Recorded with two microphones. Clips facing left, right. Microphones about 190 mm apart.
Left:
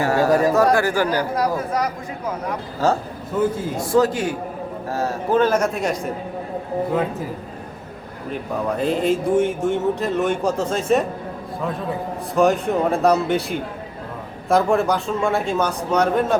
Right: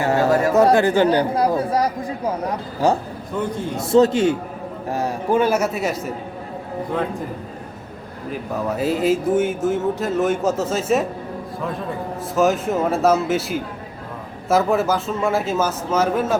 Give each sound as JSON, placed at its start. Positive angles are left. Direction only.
{"t": 0.0, "sound": "a sound", "side_deg": -20}
{"t": 0.5, "sound": "speech", "side_deg": -20}
{"t": 2.8, "sound": "a man's voice", "side_deg": -15}
{"t": 3.8, "sound": "a man's voice", "side_deg": -25}
{"t": 8.3, "sound": "speech", "side_deg": -5}
{"t": 12.3, "sound": "speech", "side_deg": 0}